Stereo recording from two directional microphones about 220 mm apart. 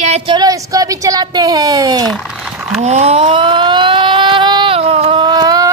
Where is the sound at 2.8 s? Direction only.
30° right (ahead or behind).